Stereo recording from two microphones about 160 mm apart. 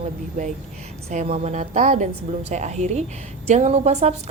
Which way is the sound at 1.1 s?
45° right (ahead or behind).